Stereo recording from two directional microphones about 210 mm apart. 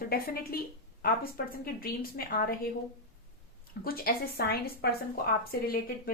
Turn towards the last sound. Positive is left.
turn(degrees=45)  # may be behind; listen again after turning